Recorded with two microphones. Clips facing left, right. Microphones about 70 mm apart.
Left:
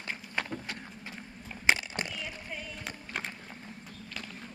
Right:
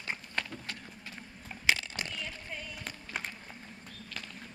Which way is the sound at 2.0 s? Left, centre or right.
Centre.